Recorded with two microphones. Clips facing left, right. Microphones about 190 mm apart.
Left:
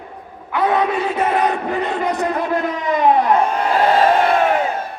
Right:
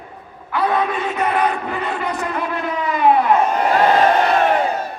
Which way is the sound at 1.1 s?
35° left (ahead or behind).